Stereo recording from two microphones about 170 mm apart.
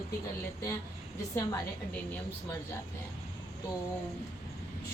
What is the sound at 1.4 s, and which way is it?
Speech, 20° left (ahead or behind).